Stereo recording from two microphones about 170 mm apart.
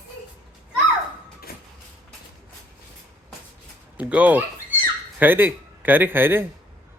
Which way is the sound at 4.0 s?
10° right (ahead or behind).